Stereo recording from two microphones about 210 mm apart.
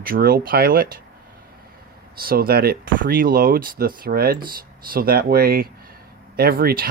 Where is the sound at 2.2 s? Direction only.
45° right (ahead or behind).